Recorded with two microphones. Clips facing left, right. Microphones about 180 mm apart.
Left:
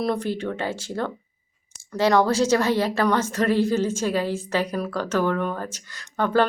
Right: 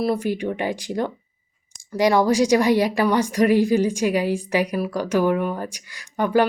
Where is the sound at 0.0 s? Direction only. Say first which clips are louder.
Right 3 dB; 10° right (ahead or behind).